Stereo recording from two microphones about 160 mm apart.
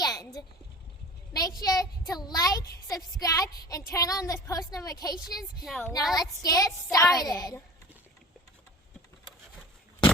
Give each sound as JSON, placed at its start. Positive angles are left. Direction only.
{"t": 0.0, "sound": "a sound", "side_deg": 25}
{"t": 1.3, "sound": "a child's voice", "side_deg": 25}
{"t": 5.6, "sound": "a woman's voice", "side_deg": 5}
{"t": 6.1, "sound": "a child's voice", "side_deg": 20}